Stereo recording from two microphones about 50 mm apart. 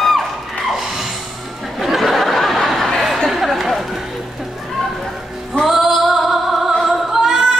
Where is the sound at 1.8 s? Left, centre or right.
Centre.